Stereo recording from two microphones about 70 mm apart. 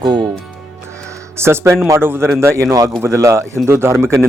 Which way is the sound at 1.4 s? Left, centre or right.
Right.